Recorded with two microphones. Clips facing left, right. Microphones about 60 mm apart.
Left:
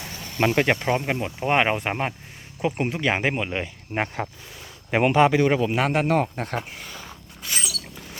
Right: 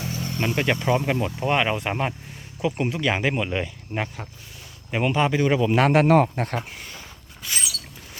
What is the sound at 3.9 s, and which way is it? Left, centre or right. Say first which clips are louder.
Speech: left 2 dB; left.